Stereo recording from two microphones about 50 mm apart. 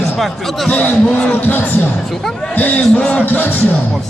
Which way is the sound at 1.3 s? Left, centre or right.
Left.